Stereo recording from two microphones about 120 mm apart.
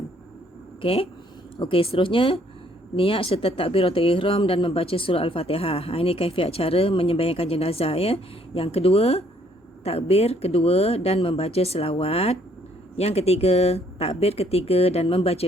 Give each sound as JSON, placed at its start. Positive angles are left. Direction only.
{"t": 0.8, "sound": "speech", "side_deg": 50}